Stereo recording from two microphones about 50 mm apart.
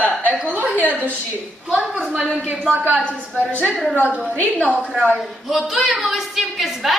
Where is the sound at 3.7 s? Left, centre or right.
Centre.